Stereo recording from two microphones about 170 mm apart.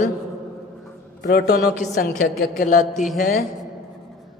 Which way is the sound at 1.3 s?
60° left (ahead or behind).